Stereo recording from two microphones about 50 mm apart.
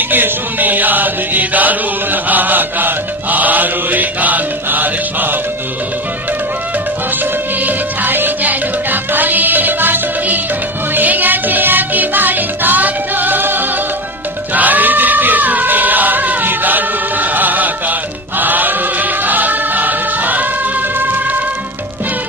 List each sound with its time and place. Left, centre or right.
0.1 s music: right
7.6 s music: right
14.5 s choir: right
18.3 s music: right